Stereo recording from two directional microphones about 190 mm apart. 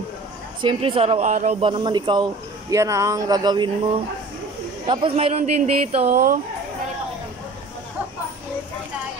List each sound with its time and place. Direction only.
0.6 s speech: 25° right (ahead or behind)
1.6 s speech: 25° right (ahead or behind)
4.8 s speech: 25° right (ahead or behind)
6.0 s speech: 50° right (ahead or behind)